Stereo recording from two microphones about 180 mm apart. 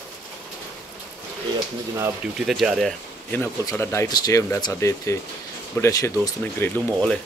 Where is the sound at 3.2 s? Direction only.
10° left (ahead or behind).